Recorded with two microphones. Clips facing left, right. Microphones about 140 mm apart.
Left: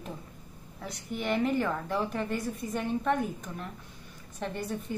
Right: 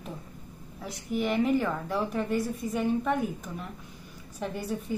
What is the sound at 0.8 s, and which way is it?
A woman's voice, 5° right (ahead or behind).